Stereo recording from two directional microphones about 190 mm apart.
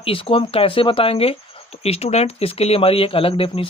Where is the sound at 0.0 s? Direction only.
30° left (ahead or behind).